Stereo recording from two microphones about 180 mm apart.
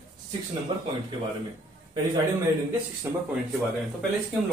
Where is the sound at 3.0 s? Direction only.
15° right (ahead or behind).